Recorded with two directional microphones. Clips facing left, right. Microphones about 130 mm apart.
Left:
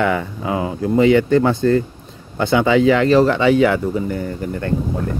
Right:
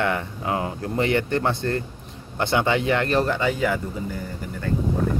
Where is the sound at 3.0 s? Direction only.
90° left; by 4.7 s 60° left (ahead or behind).